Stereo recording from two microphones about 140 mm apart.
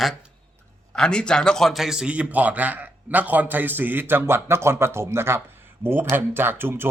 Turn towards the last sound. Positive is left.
turn(degrees=-15)  # may be behind; listen again after turning